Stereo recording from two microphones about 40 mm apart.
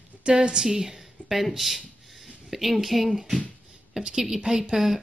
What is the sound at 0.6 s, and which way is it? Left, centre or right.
Speech, centre.